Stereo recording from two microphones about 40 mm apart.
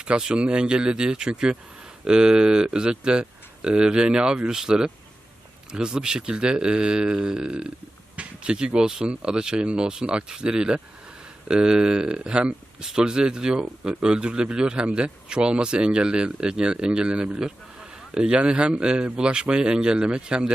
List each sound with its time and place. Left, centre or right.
0.3 s speech: right